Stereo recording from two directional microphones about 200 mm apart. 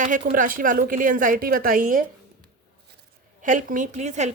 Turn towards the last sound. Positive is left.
turn(degrees=-35)  # may be behind; listen again after turning